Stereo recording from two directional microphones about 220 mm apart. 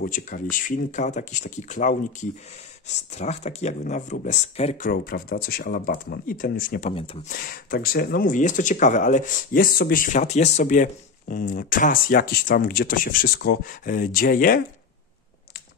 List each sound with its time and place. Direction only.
0.0 s speech: 35° left (ahead or behind)
6.9 s speech: 25° left (ahead or behind)
7.3 s speech: 40° left (ahead or behind)